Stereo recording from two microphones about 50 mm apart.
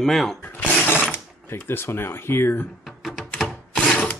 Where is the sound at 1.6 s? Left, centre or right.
Left.